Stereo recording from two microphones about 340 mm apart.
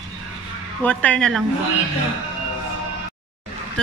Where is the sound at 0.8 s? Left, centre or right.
Centre.